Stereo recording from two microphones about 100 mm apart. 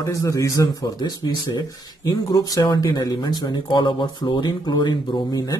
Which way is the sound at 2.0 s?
40° left (ahead or behind).